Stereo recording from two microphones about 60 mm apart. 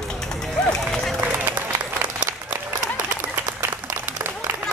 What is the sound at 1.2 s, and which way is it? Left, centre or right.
Applause, right.